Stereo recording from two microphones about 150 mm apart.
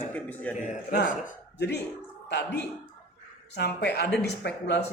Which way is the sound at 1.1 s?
75° left (ahead or behind).